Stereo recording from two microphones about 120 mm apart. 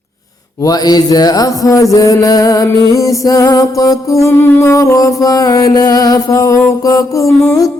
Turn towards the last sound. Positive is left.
turn(degrees=30)  # may be behind; listen again after turning